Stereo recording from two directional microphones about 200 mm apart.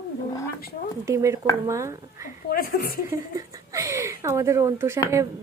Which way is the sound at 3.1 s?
15° right (ahead or behind).